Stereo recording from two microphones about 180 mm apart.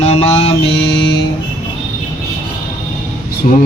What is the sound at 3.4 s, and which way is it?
Mantra, 45° left (ahead or behind).